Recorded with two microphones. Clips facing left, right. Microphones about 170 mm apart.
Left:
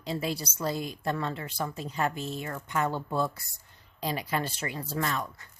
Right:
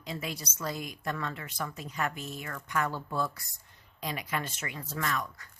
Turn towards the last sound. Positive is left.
turn(degrees=30)  # may be behind; listen again after turning